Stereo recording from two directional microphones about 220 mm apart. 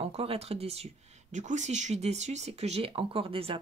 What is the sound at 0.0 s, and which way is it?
Speech, 25° right (ahead or behind).